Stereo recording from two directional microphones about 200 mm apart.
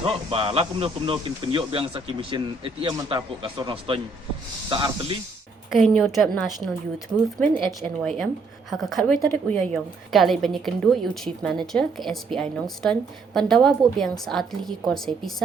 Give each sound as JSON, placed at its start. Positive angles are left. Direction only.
{"t": 0.0, "sound": "a man's voice", "side_deg": -30}
{"t": 5.7, "sound": "a woman's voice", "side_deg": 0}
{"t": 8.7, "sound": "a woman's voice", "side_deg": 0}